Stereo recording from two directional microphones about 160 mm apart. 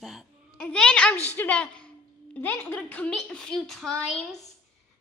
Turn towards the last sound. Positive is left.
turn(degrees=5)  # may be behind; listen again after turning